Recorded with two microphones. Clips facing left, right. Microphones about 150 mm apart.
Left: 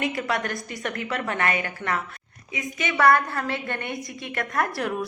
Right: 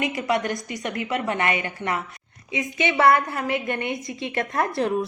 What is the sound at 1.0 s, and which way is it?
A woman's voice, 20° right (ahead or behind).